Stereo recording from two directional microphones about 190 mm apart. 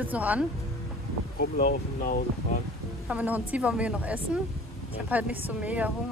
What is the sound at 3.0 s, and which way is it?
Speech, 10° right (ahead or behind).